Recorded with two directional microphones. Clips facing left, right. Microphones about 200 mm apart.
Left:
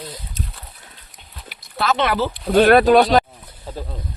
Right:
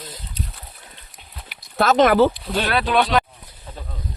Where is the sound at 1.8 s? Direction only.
45° right (ahead or behind).